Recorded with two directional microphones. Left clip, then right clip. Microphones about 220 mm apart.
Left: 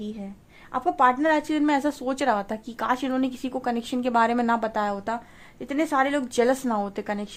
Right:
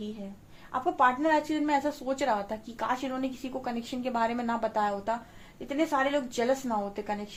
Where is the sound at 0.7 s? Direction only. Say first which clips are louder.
Left 4 dB; 45° left (ahead or behind).